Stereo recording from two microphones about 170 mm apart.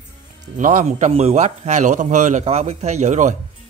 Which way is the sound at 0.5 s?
50° right (ahead or behind).